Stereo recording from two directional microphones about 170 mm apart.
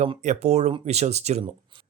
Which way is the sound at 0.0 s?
40° right (ahead or behind).